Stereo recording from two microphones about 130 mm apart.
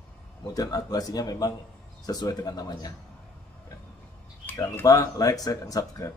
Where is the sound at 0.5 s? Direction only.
30° left (ahead or behind).